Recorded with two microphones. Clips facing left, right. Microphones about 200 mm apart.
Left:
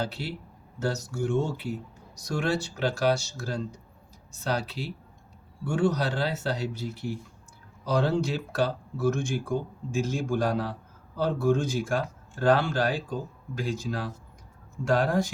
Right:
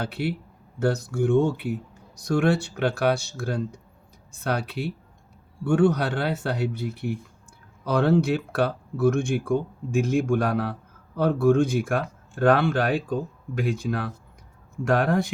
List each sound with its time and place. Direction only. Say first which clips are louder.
0.0 s speech: right 4 dB; 55° right (ahead or behind)